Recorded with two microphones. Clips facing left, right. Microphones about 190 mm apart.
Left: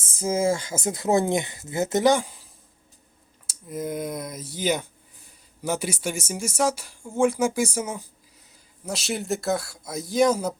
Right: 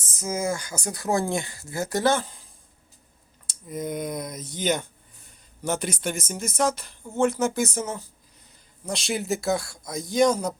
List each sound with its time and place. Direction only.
0.1 s speech: 30° left (ahead or behind); by 10.5 s 5° left (ahead or behind)